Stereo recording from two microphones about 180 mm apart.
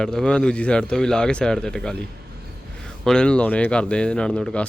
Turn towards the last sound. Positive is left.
turn(degrees=5)  # may be behind; listen again after turning